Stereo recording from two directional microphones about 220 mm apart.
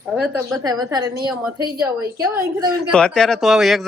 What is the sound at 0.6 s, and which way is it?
A woman's voice, 15° right (ahead or behind).